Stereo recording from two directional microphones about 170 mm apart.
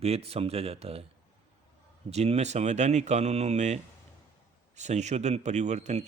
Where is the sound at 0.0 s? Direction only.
35° right (ahead or behind).